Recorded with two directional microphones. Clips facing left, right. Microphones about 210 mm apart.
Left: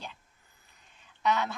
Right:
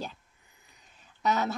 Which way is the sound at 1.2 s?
40° right (ahead or behind).